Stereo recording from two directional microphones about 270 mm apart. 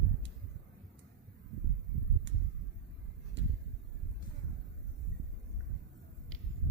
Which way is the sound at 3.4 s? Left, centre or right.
Right.